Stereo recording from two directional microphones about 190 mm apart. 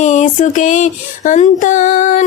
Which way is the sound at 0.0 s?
40° left (ahead or behind).